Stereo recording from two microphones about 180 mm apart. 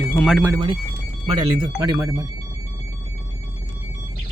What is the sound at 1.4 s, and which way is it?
Speech, 25° right (ahead or behind).